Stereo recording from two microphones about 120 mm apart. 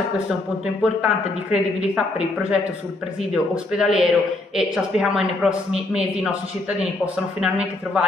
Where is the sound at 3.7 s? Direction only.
5° right (ahead or behind).